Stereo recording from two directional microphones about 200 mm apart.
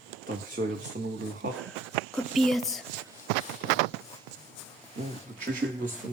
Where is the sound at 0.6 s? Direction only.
55° right (ahead or behind).